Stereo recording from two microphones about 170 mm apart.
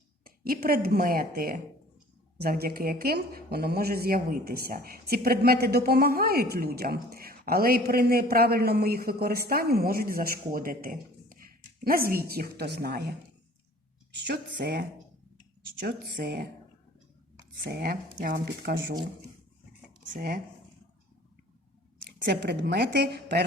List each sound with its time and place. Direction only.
0.3 s speech: 60° right (ahead or behind)
17.7 s speech: 70° right (ahead or behind)
20.1 s speech: 60° right (ahead or behind)
22.2 s speech: 70° right (ahead or behind)